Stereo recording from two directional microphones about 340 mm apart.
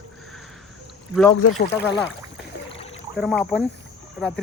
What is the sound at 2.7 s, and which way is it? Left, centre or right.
Boat, centre.